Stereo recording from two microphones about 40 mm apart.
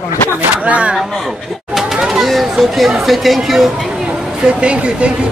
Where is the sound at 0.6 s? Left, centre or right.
Right.